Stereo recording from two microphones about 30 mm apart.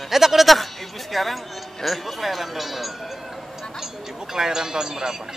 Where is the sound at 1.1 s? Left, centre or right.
Centre.